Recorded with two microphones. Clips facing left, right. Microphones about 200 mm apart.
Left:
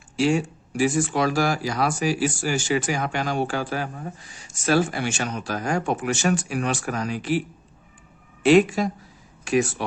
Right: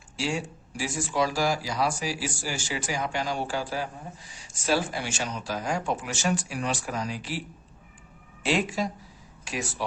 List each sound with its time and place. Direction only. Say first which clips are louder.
0.2 s speech: left 9 dB; 55° left (ahead or behind)
8.4 s speech: left 10 dB; 55° left (ahead or behind)